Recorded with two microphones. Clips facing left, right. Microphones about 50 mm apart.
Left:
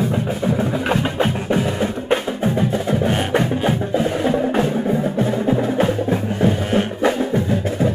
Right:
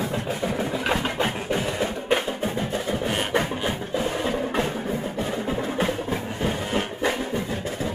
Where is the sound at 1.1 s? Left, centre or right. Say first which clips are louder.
Left 6 dB; left.